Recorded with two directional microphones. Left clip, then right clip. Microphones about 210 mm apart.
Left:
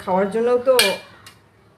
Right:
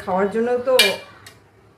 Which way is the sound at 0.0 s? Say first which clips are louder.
Left 1 dB; 30° left (ahead or behind).